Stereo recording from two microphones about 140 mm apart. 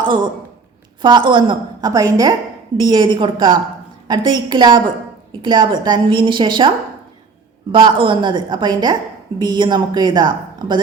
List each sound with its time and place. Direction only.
1.0 s a woman's voice: 35° right (ahead or behind)
7.7 s a woman's voice: 35° right (ahead or behind)